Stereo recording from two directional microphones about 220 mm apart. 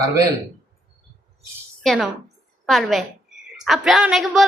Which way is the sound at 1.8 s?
Centre (ahead or behind).